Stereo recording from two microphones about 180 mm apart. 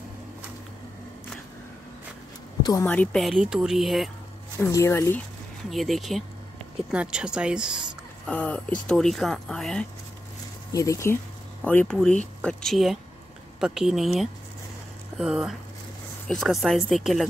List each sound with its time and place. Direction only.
2.6 s a woman's voice: 20° left (ahead or behind)
2.9 s speech: 5° left (ahead or behind)
4.6 s speech: 15° left (ahead or behind)
5.7 s speech: centre (ahead or behind)
8.3 s speech: 5° left (ahead or behind)
10.7 s speech: 20° left (ahead or behind); by 17.3 s centre (ahead or behind)